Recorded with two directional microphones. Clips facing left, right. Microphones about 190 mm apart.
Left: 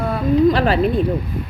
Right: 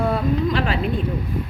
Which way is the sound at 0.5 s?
35° left (ahead or behind).